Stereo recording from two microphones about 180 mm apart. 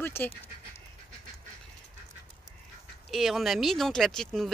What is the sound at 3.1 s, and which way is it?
Speech, centre (ahead or behind).